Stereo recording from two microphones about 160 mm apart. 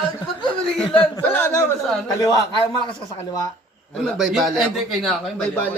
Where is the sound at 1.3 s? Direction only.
15° left (ahead or behind).